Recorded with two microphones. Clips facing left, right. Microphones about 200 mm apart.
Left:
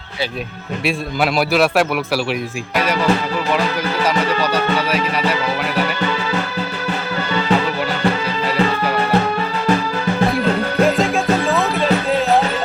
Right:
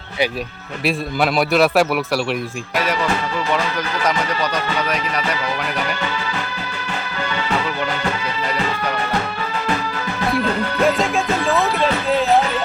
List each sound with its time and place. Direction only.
0.9 s a man's voice: centre (ahead or behind)
10.8 s music: centre (ahead or behind)